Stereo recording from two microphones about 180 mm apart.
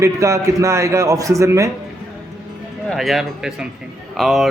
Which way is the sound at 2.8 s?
Centre (ahead or behind).